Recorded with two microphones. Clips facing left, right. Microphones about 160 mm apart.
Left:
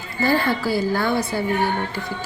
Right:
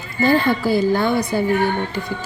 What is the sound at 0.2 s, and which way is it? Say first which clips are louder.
Speech: right 4 dB; 20° right (ahead or behind).